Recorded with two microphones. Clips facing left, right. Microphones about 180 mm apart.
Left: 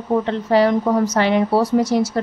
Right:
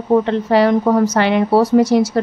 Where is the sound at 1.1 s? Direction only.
70° right (ahead or behind).